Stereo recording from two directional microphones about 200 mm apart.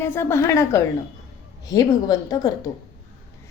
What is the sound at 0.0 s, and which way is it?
A woman's voice, 10° left (ahead or behind).